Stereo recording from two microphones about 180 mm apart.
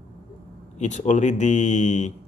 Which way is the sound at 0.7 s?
40° left (ahead or behind).